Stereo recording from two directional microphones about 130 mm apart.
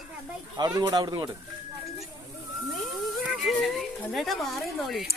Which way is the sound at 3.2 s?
Centre (ahead or behind).